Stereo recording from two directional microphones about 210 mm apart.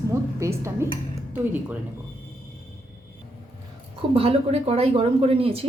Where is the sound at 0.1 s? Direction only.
15° right (ahead or behind).